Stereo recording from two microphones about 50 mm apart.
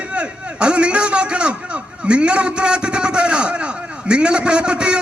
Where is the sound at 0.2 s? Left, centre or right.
Right.